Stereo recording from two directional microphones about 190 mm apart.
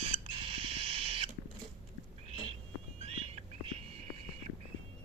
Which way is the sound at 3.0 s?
30° right (ahead or behind).